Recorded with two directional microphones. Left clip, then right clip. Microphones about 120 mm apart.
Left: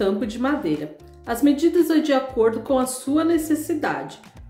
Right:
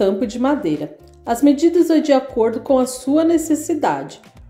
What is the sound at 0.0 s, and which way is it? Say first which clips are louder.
A woman's voice: right 5 dB; 35° right (ahead or behind).